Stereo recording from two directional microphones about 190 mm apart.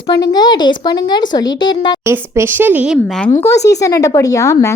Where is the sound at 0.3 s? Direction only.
20° left (ahead or behind).